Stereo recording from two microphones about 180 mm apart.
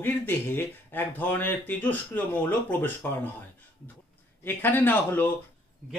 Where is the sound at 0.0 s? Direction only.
10° left (ahead or behind).